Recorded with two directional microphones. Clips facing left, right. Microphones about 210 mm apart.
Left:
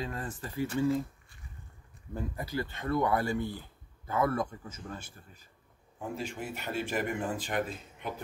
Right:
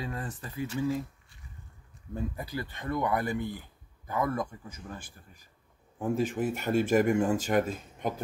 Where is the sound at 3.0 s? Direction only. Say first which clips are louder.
Even; 20° right (ahead or behind).